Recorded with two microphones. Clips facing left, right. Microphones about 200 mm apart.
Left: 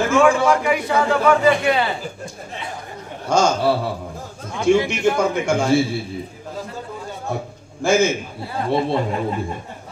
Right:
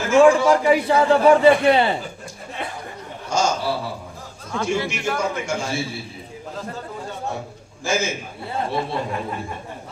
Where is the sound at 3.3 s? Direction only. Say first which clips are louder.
Left 5 dB; 55° left (ahead or behind).